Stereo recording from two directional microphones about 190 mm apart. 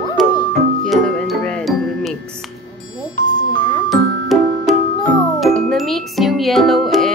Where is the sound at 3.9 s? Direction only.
Centre (ahead or behind).